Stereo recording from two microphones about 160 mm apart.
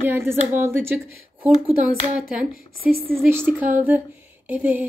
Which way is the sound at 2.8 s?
65° right (ahead or behind).